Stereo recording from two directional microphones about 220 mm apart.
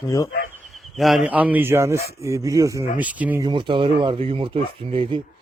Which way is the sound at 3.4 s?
20° right (ahead or behind).